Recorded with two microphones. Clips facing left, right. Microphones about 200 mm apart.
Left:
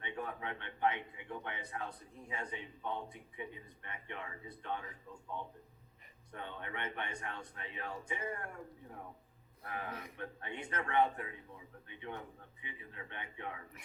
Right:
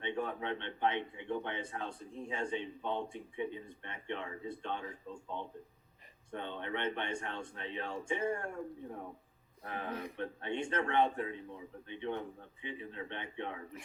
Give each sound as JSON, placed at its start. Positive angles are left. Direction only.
{"t": 0.0, "sound": "a man's voice", "side_deg": -30}
{"t": 9.6, "sound": "a man's voice", "side_deg": -25}